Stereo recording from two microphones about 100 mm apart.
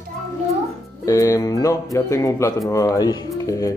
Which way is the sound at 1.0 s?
35° left (ahead or behind).